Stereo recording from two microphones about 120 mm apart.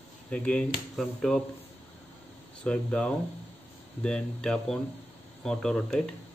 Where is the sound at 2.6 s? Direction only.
10° left (ahead or behind).